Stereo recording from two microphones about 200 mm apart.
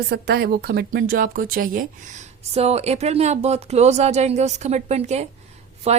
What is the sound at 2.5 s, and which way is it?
A woman's voice, 30° right (ahead or behind).